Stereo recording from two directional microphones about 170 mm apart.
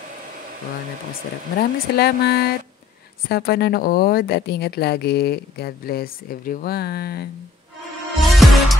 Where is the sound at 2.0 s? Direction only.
70° left (ahead or behind).